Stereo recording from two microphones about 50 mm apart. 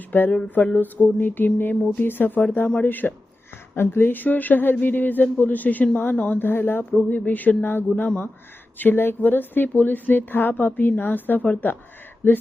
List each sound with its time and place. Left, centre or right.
0.3 s a sound: left
0.8 s a woman's voice: left
7.1 s a woman's voice: left